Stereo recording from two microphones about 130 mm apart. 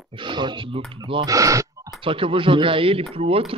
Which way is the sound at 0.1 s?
40° right (ahead or behind).